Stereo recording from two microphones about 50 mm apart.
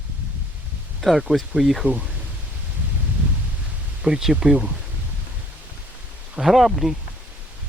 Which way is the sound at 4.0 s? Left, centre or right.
Centre.